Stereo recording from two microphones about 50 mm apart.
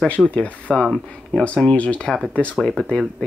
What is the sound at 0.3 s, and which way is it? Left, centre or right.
Speech, left.